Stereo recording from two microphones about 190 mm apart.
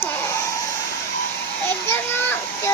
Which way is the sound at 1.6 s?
10° left (ahead or behind).